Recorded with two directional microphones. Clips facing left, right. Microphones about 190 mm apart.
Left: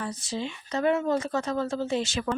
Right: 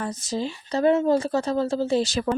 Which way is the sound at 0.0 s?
45° right (ahead or behind).